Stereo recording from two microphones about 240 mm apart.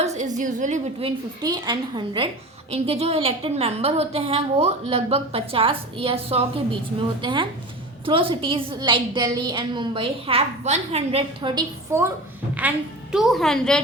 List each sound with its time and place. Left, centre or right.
0.0 s a woman's voice: right
12.5 s a woman's voice: centre